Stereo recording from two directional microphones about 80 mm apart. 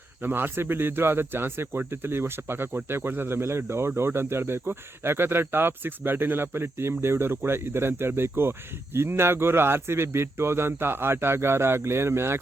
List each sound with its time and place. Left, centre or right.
0.2 s speech: right